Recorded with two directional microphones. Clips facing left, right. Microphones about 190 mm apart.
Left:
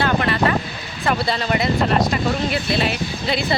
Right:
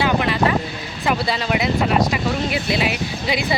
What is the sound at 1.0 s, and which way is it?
Speech, 5° right (ahead or behind).